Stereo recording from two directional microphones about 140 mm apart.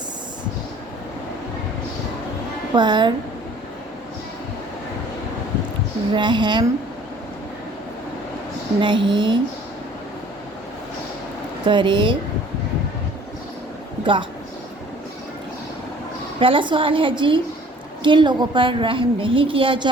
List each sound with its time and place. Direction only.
2.7 s a woman's voice: 30° right (ahead or behind)
6.1 s a woman's voice: 35° right (ahead or behind)
8.8 s a woman's voice: 35° right (ahead or behind)
11.6 s a woman's voice: 35° right (ahead or behind)
14.0 s speech: 35° right (ahead or behind)
16.4 s a woman's voice: 35° right (ahead or behind)